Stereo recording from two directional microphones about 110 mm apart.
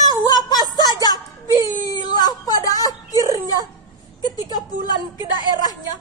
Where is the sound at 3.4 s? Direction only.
35° left (ahead or behind).